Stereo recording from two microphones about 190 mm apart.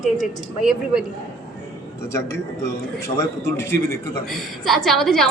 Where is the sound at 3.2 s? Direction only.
15° left (ahead or behind).